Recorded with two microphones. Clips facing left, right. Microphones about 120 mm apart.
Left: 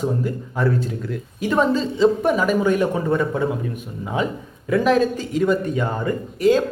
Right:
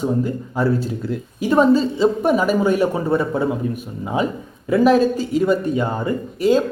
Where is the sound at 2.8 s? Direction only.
30° right (ahead or behind).